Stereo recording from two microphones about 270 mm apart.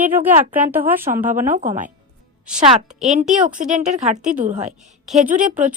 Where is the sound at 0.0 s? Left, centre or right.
Centre.